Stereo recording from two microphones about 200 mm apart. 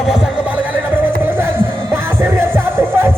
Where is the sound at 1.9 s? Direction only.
10° right (ahead or behind).